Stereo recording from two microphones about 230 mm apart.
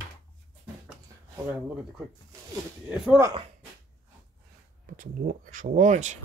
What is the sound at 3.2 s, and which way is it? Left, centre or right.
Speech, right.